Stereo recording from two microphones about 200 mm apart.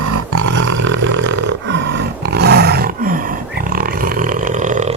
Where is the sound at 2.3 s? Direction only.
55° right (ahead or behind).